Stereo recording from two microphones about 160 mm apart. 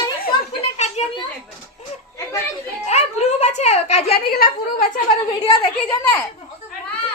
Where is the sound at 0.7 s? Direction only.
45° left (ahead or behind).